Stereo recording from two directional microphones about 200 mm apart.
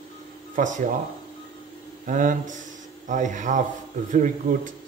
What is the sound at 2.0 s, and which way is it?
Speech, 40° right (ahead or behind).